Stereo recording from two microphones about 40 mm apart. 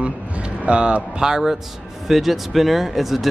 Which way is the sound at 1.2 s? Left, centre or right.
Centre.